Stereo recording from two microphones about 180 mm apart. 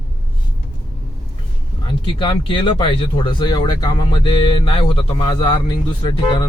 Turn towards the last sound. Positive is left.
turn(degrees=25)  # may be behind; listen again after turning